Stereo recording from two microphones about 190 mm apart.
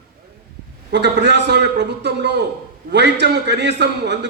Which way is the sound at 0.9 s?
65° right (ahead or behind).